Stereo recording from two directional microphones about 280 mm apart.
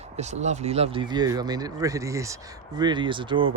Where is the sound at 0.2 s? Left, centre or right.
Right.